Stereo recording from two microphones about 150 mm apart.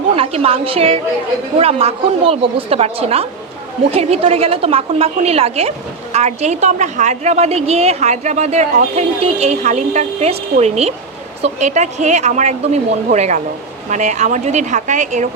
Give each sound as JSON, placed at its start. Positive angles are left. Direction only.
{"t": 0.2, "sound": "a woman's voice", "side_deg": -40}